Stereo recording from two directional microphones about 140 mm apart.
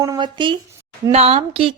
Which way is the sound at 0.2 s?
35° right (ahead or behind).